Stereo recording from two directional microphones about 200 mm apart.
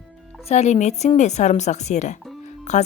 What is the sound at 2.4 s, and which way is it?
Music, 35° left (ahead or behind).